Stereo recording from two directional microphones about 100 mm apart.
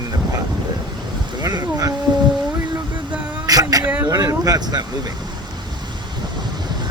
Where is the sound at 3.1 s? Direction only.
15° right (ahead or behind).